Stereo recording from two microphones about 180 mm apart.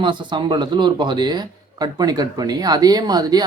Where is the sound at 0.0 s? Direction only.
25° right (ahead or behind).